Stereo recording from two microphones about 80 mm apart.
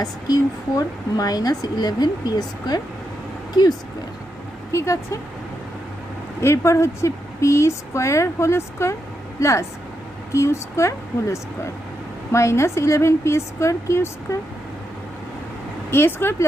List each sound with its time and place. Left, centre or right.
0.0 s a woman's voice: left
4.7 s speech: left
6.4 s speech: left
15.9 s speech: left